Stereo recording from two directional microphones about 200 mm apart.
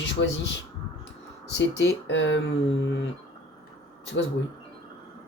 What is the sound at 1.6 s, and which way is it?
Speech, 65° left (ahead or behind).